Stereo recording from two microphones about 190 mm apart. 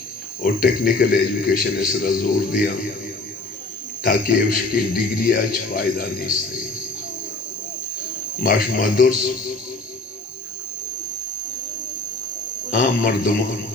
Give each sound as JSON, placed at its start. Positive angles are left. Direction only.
{"t": 0.4, "sound": "a man's voice", "side_deg": 50}
{"t": 4.3, "sound": "a man's voice", "side_deg": 50}
{"t": 8.4, "sound": "a man's voice", "side_deg": 50}
{"t": 12.7, "sound": "a man's voice", "side_deg": 50}